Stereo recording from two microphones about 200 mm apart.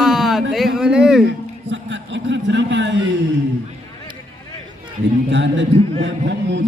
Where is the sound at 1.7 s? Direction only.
65° right (ahead or behind).